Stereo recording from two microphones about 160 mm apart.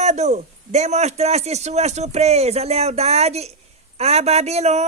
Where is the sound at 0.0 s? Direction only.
45° right (ahead or behind).